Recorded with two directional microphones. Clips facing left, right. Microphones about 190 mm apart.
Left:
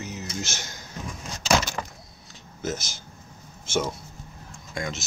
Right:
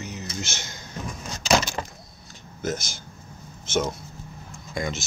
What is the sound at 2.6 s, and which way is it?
Speech, 5° left (ahead or behind).